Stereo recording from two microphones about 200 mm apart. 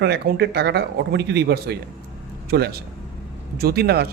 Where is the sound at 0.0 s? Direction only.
55° right (ahead or behind).